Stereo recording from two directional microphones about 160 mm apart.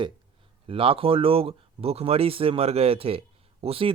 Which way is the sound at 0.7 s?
35° right (ahead or behind).